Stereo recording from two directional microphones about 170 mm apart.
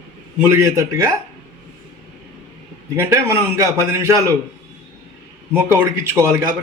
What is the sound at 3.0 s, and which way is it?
A man's voice, 15° right (ahead or behind).